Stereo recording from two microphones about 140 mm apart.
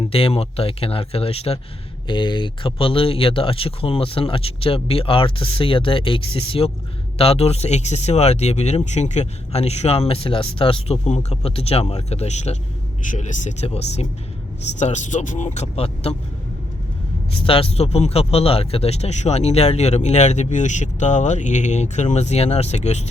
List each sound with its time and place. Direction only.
0.0 s speech: 45° left (ahead or behind)
2.0 s speech: 35° left (ahead or behind)
17.4 s speech: 40° left (ahead or behind)